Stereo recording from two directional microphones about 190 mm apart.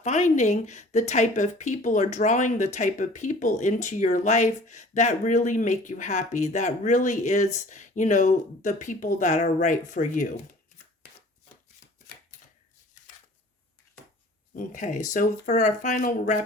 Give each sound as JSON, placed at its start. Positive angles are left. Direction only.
{"t": 0.0, "sound": "speech", "side_deg": 40}
{"t": 14.5, "sound": "speech", "side_deg": 40}